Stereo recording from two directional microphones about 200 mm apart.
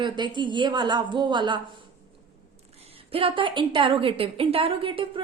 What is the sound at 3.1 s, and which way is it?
A woman's voice, 25° right (ahead or behind).